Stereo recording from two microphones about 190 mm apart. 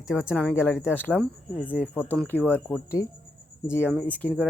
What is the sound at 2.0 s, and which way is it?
Speech, 10° left (ahead or behind).